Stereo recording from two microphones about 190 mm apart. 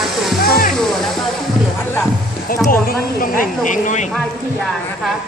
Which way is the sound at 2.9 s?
45° left (ahead or behind).